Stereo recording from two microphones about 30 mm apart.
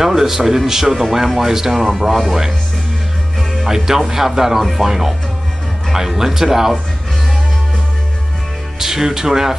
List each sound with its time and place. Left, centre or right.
0.0 s speech: centre
3.6 s speech: centre
8.7 s speech: centre